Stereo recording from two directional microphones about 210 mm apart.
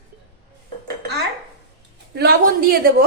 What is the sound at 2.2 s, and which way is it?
Speech, 50° right (ahead or behind).